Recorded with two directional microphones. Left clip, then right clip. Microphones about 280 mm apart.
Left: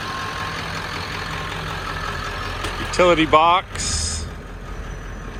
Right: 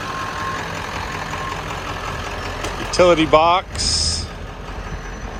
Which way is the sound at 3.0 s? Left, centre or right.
Centre.